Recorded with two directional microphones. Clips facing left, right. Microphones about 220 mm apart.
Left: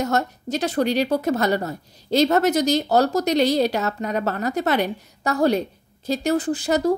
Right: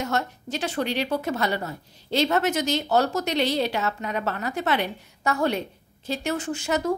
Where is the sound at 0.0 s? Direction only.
40° left (ahead or behind).